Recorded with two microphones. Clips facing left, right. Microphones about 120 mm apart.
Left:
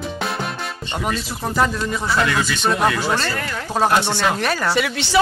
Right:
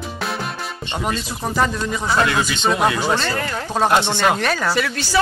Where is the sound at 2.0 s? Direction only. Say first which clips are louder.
Right 2 dB; 25° right (ahead or behind).